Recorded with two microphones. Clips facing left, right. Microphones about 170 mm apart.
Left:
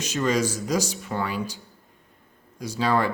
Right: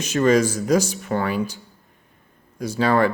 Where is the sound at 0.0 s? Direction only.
55° right (ahead or behind).